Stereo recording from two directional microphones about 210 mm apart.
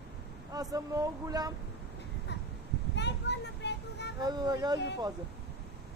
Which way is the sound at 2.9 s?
55° left (ahead or behind).